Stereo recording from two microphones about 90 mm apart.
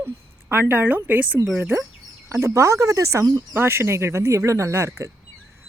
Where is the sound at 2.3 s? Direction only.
30° right (ahead or behind).